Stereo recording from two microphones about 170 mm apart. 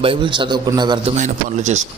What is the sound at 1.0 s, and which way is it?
Speech, 45° right (ahead or behind).